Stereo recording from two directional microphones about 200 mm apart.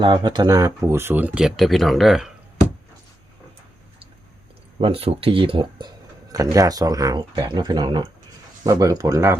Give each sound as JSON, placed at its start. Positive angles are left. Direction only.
{"t": 0.0, "sound": "speech", "side_deg": -25}
{"t": 4.8, "sound": "speech", "side_deg": -30}